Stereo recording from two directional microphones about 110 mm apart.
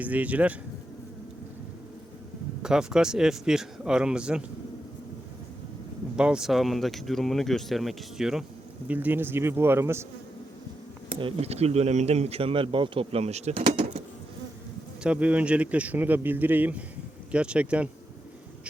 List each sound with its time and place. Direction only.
0.0 s speech: 15° right (ahead or behind)
2.6 s speech: 5° right (ahead or behind)
6.1 s speech: 10° right (ahead or behind)
8.9 s speech: 15° right (ahead or behind)
11.1 s speech: 55° right (ahead or behind); by 13.7 s 75° right (ahead or behind)
15.0 s speech: 10° right (ahead or behind)